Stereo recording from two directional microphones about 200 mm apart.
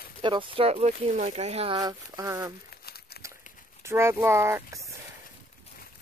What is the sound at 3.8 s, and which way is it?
Speech, 15° right (ahead or behind).